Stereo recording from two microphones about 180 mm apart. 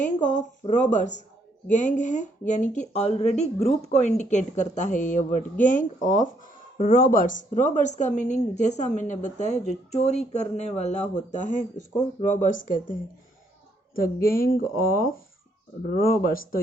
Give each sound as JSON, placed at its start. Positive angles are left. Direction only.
{"t": 0.0, "sound": "speech", "side_deg": 45}